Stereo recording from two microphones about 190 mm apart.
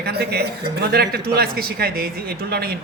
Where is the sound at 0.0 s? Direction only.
55° right (ahead or behind).